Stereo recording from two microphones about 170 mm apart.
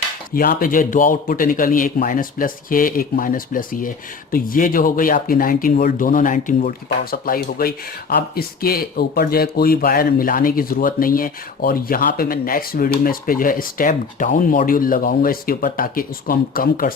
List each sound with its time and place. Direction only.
0.3 s speech: 55° left (ahead or behind)